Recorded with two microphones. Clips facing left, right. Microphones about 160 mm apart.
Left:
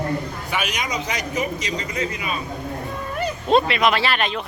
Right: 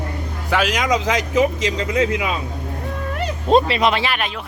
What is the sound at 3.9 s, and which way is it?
Speech, 15° right (ahead or behind).